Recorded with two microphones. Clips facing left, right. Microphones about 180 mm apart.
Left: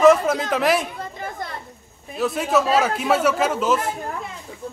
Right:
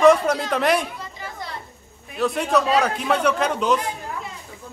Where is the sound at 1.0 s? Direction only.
50° left (ahead or behind).